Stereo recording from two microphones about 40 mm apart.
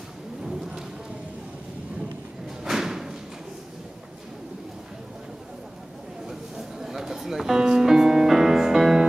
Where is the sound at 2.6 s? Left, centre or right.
Centre.